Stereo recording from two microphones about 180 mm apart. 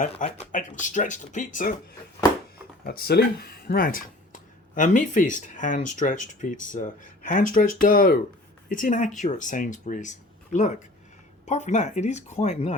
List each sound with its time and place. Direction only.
0.2 s speech: 45° left (ahead or behind)
2.8 s speech: 55° left (ahead or behind); by 12.7 s 40° left (ahead or behind)